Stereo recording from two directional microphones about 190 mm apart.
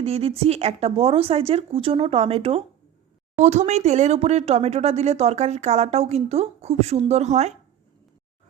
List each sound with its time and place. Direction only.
0.0 s speech: 30° right (ahead or behind)